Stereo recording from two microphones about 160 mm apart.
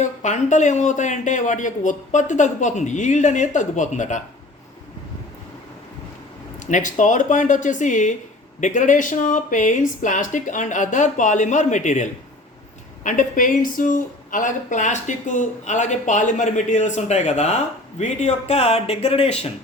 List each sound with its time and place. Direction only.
0.0 s speech: 50° left (ahead or behind)
6.7 s speech: 50° left (ahead or behind)
13.1 s speech: 55° left (ahead or behind)